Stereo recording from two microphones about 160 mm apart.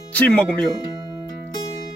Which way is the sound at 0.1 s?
10° left (ahead or behind).